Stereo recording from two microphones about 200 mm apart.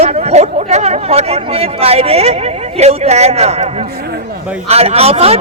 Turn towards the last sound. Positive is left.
turn(degrees=-30)  # may be behind; listen again after turning